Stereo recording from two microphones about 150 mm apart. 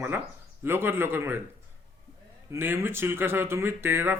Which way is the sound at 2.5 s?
15° right (ahead or behind).